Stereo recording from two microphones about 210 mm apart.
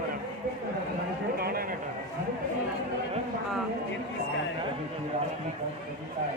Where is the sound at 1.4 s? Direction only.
45° right (ahead or behind).